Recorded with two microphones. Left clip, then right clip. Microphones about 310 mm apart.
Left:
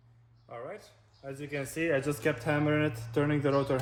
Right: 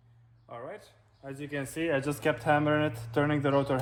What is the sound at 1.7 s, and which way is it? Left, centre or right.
Speech, centre.